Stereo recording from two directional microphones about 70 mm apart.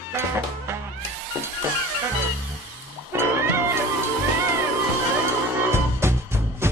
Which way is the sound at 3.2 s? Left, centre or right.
Right.